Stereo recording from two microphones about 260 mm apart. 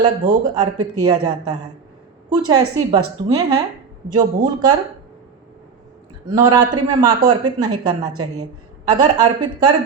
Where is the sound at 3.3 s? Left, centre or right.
Centre.